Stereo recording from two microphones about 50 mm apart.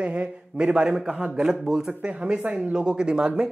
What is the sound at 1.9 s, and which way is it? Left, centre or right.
Speech, right.